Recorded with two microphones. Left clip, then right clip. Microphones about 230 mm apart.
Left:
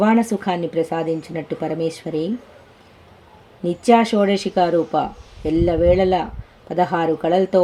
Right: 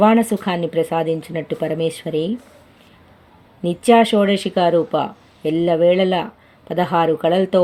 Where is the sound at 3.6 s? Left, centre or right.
Right.